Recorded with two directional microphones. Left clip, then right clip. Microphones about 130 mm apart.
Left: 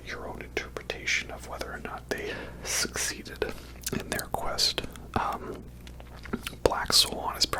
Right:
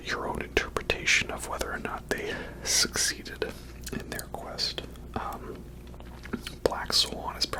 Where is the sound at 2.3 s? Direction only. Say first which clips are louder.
Right 3 dB; centre (ahead or behind).